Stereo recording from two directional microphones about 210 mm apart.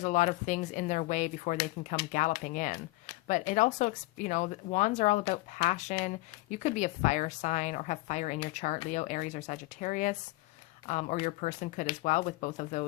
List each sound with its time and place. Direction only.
0.0 s speech: 35° left (ahead or behind)